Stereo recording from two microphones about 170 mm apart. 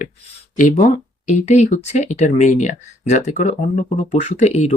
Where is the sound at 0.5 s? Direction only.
50° left (ahead or behind).